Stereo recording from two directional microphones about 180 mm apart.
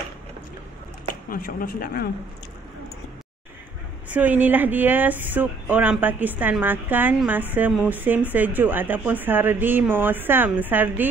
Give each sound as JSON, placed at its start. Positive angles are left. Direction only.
{"t": 1.3, "sound": "speech", "side_deg": 55}
{"t": 4.1, "sound": "speech", "side_deg": -10}